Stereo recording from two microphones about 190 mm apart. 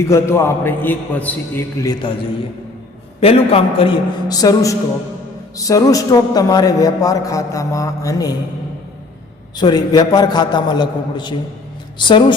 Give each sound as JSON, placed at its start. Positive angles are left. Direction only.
{"t": 0.0, "sound": "a man's voice", "side_deg": 15}
{"t": 3.2, "sound": "a man's voice", "side_deg": 30}
{"t": 9.6, "sound": "a man's voice", "side_deg": 20}